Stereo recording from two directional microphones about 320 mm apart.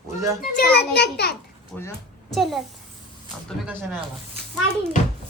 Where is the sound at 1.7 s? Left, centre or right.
Centre.